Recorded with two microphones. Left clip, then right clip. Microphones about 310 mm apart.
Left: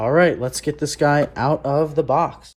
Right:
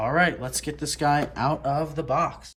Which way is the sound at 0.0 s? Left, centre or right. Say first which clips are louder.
Left 6 dB; centre.